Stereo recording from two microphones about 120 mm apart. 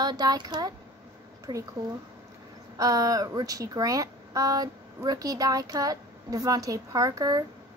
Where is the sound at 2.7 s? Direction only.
30° right (ahead or behind).